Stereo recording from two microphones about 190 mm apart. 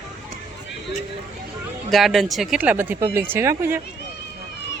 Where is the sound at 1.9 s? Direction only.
Centre (ahead or behind).